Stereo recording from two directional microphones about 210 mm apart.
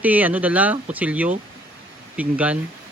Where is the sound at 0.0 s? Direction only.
10° right (ahead or behind).